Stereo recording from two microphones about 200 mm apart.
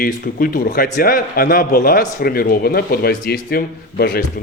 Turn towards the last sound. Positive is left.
turn(degrees=50)  # may be behind; listen again after turning